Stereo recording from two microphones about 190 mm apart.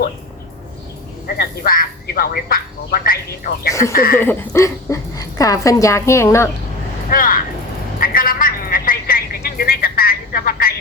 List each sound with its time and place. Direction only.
1.4 s speech: 50° left (ahead or behind)
3.7 s a woman's voice: 15° left (ahead or behind)
3.9 s speech: 50° left (ahead or behind)
4.2 s a woman's voice: 10° left (ahead or behind)
7.1 s speech: 45° left (ahead or behind)
7.9 s telephone: 50° left (ahead or behind)